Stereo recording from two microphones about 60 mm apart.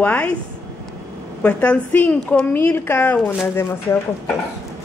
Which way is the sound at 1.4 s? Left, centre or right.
Left.